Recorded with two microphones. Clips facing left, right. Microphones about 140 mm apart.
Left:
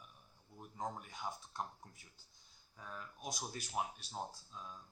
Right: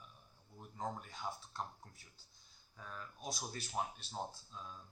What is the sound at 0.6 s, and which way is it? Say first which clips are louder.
Speech: even; 15° left (ahead or behind).